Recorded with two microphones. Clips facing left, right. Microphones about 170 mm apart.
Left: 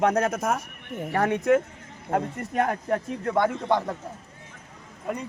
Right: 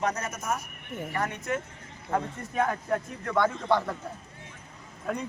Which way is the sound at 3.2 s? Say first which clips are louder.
Left 2 dB; 25° left (ahead or behind).